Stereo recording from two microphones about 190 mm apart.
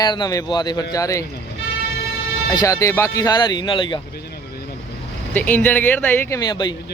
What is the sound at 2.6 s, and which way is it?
Speech, 15° left (ahead or behind).